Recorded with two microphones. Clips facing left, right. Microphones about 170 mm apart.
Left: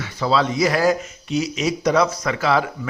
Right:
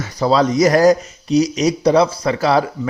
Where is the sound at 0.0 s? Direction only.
40° right (ahead or behind).